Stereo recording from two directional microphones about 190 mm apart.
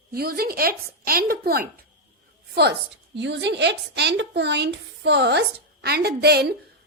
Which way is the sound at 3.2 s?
70° right (ahead or behind).